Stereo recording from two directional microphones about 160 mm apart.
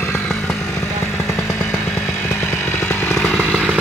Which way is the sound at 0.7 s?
15° left (ahead or behind).